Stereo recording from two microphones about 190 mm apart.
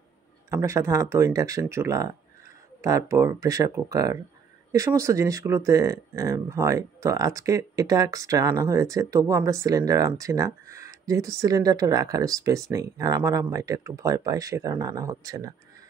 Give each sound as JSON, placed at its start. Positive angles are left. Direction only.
{"t": 0.5, "sound": "speech", "side_deg": -15}